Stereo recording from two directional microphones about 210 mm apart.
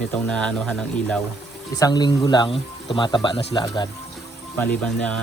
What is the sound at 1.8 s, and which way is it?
Speech, 20° left (ahead or behind).